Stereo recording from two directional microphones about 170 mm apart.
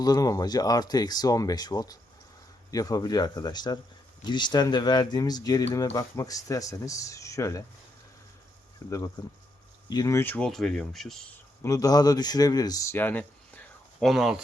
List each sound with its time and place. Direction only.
0.0 s speech: 20° left (ahead or behind)
8.8 s speech: 20° left (ahead or behind); by 11.3 s centre (ahead or behind)
11.6 s a man's voice: 20° left (ahead or behind); by 14.4 s centre (ahead or behind)